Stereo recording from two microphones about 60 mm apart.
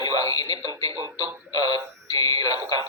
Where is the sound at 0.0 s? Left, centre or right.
Left.